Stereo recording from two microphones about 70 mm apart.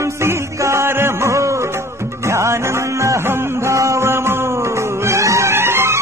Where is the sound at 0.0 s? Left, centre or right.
Right.